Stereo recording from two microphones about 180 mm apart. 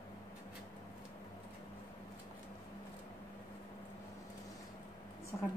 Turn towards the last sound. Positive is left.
turn(degrees=10)  # may be behind; listen again after turning